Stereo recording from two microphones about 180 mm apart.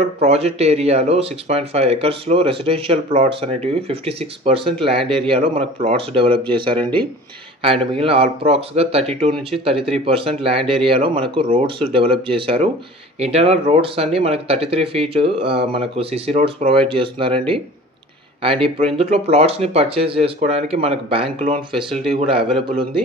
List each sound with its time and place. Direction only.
0.2 s speech: 35° right (ahead or behind)